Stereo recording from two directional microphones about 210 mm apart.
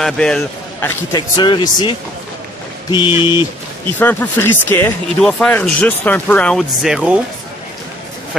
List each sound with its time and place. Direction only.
0.0 s speech: 5° left (ahead or behind); by 3.3 s 25° left (ahead or behind)
4.0 s speech: 10° left (ahead or behind)